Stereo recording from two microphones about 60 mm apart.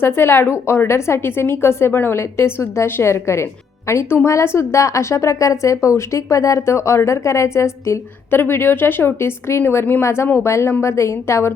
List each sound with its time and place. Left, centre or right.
0.0 s a woman's voice: left
8.3 s a woman's voice: left